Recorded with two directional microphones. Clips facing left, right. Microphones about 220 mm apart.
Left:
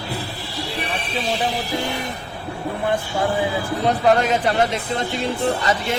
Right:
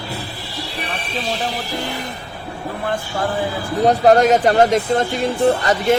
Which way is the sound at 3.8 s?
40° right (ahead or behind).